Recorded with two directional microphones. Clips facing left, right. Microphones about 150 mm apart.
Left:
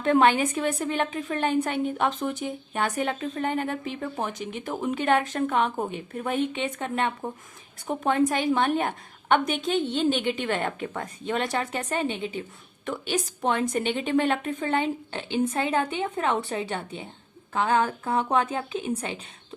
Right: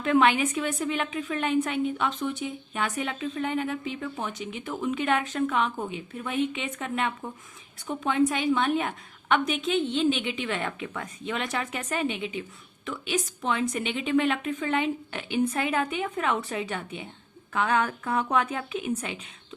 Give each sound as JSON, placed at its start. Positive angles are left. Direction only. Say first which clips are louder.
{"t": 0.0, "sound": "a woman's voice", "louder": "left 2 dB", "side_deg": 35}